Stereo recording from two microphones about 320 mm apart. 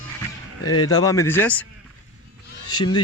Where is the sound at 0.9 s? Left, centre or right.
Centre.